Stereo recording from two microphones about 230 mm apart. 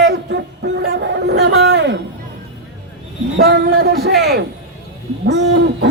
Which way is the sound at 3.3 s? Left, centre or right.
Right.